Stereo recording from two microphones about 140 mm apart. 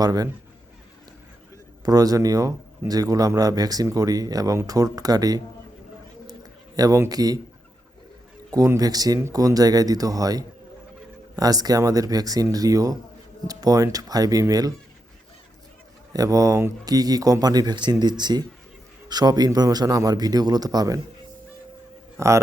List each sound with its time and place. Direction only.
0.0 s speech: 25° right (ahead or behind)
1.8 s speech: 25° right (ahead or behind)
6.2 s a sound: 25° right (ahead or behind)
8.5 s speech: 25° right (ahead or behind)
16.1 s speech: 25° right (ahead or behind)
22.2 s speech: 20° right (ahead or behind)